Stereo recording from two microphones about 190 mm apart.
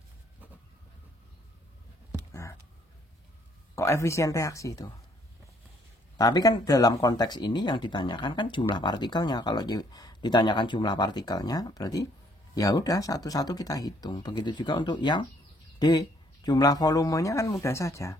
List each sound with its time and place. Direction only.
3.7 s speech: 15° left (ahead or behind)
6.1 s speech: 20° left (ahead or behind)